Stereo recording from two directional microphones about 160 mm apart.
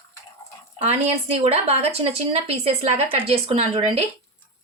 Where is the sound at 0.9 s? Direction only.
40° right (ahead or behind).